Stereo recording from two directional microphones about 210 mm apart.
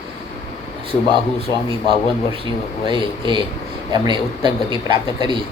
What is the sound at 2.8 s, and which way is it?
Speech, 25° right (ahead or behind).